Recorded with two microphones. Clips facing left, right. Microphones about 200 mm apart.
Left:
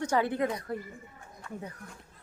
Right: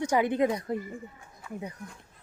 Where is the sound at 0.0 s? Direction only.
15° right (ahead or behind).